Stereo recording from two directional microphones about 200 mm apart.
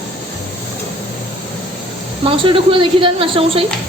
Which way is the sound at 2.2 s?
25° right (ahead or behind).